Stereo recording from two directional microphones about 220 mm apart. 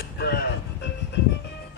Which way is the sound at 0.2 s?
50° left (ahead or behind).